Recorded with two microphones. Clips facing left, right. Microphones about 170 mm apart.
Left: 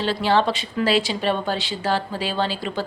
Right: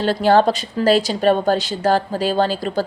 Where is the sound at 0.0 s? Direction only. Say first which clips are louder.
Right 5 dB; 45° right (ahead or behind).